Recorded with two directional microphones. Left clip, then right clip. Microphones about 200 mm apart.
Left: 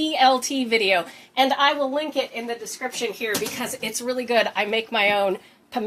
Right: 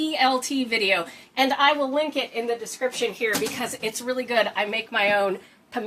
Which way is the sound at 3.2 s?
20° left (ahead or behind).